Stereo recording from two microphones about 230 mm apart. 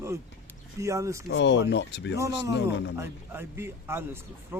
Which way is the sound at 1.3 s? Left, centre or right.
Left.